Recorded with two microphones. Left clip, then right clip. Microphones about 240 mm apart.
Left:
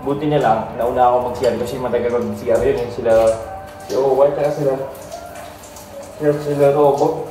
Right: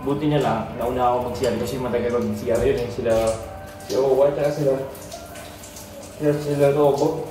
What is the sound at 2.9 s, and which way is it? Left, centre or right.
A man's voice, left.